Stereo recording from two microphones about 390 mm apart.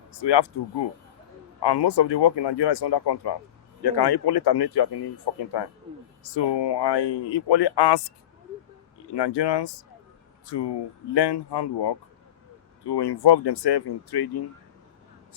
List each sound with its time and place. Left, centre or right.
0.2 s speech: left
1.6 s speech: left
3.9 s speech: left
9.1 s speech: left
12.9 s speech: left